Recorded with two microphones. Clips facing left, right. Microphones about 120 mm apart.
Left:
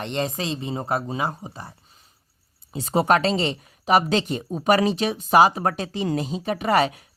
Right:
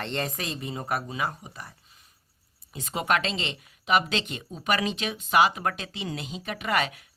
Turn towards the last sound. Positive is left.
turn(degrees=35)  # may be behind; listen again after turning